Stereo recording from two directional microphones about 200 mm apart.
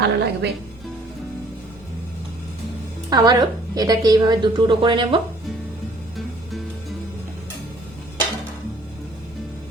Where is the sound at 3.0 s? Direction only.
20° right (ahead or behind).